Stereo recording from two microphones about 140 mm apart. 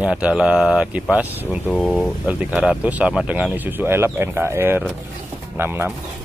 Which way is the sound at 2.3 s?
10° right (ahead or behind).